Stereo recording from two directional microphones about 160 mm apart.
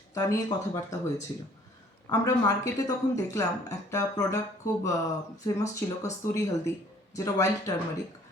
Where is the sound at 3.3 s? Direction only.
20° left (ahead or behind).